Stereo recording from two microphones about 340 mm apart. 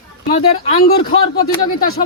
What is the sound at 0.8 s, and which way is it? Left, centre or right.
Speech, left.